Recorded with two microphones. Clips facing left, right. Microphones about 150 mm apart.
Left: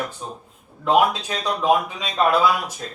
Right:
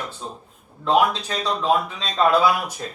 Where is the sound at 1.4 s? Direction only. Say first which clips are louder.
Left 2 dB; 10° left (ahead or behind).